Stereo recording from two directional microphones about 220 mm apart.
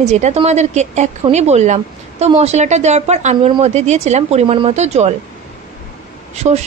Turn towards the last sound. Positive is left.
turn(degrees=-30)  # may be behind; listen again after turning